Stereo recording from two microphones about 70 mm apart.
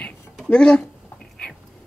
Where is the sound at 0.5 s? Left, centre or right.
Centre.